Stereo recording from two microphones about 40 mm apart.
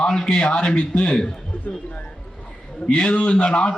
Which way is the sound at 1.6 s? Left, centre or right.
Left.